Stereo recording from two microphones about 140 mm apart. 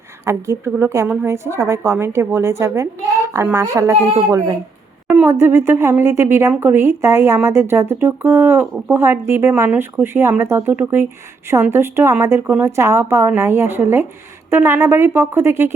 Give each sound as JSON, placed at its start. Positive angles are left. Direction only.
{"t": 0.3, "sound": "a woman's voice", "side_deg": -20}
{"t": 5.1, "sound": "speech", "side_deg": -15}